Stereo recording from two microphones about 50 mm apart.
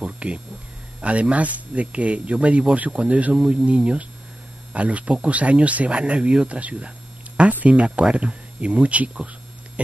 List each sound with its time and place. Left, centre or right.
0.0 s a sound: right
1.0 s speech: right
3.3 s speech: centre